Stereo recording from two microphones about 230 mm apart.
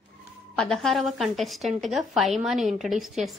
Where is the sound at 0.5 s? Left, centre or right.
Centre.